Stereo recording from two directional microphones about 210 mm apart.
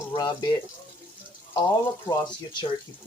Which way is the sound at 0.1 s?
20° left (ahead or behind).